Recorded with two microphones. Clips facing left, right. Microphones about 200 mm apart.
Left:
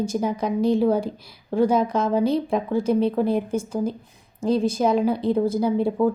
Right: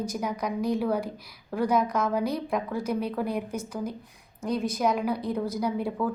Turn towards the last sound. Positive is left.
turn(degrees=25)  # may be behind; listen again after turning